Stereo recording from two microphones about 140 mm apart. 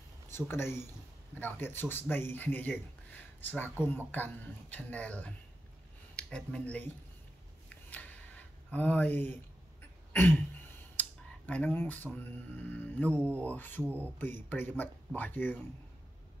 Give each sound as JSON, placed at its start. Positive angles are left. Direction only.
{"t": 0.3, "sound": "a man's voice", "side_deg": 15}
{"t": 7.7, "sound": "a sound", "side_deg": 10}
{"t": 9.8, "sound": "throat clearing", "side_deg": 15}
{"t": 11.0, "sound": "a man's voice", "side_deg": 10}
{"t": 13.8, "sound": "speech", "side_deg": -15}
{"t": 14.5, "sound": "a man's voice", "side_deg": 15}